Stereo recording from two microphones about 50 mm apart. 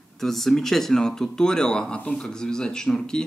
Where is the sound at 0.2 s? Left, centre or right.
Centre.